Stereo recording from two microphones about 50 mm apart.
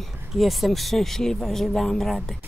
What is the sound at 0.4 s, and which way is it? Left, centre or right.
Speech, centre.